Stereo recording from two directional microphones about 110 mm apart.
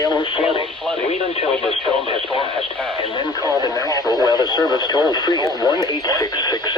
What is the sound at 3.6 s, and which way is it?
Speech, 30° left (ahead or behind).